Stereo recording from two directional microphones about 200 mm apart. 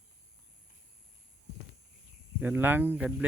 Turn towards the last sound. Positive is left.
turn(degrees=-10)  # may be behind; listen again after turning